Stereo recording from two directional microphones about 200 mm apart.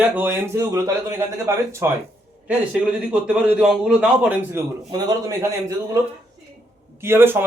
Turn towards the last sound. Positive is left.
turn(degrees=-10)  # may be behind; listen again after turning